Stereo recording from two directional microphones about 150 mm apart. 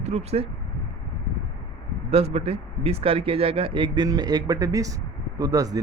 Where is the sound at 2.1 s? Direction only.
40° right (ahead or behind); by 5.8 s 25° right (ahead or behind).